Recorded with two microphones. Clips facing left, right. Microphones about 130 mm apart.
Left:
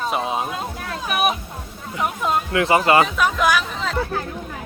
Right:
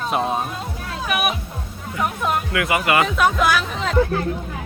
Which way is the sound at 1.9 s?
20° left (ahead or behind).